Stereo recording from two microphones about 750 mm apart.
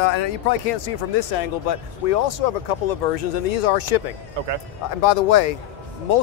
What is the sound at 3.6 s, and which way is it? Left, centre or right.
Speech, left.